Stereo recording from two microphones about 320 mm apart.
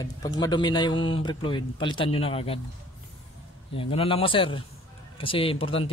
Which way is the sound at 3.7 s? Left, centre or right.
Centre.